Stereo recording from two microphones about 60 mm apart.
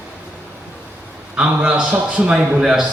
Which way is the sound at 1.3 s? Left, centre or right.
Centre.